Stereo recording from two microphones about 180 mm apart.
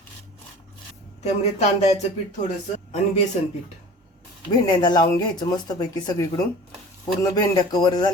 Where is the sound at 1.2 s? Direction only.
35° left (ahead or behind).